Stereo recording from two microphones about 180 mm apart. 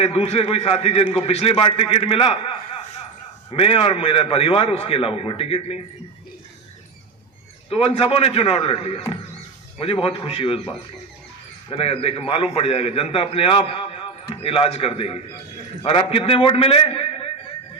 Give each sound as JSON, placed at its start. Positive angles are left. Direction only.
{"t": 0.0, "sound": "a man's voice", "side_deg": 35}
{"t": 7.7, "sound": "a man's voice", "side_deg": 35}
{"t": 11.7, "sound": "a man's voice", "side_deg": 35}